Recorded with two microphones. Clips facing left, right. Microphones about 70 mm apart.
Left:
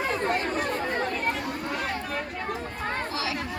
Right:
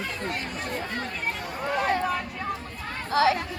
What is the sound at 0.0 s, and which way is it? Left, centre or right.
Chatter, left.